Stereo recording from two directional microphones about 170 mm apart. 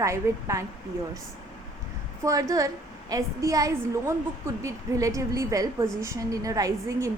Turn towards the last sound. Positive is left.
turn(degrees=-20)  # may be behind; listen again after turning